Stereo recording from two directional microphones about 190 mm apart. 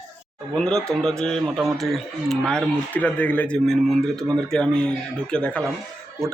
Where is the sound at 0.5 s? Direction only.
5° left (ahead or behind).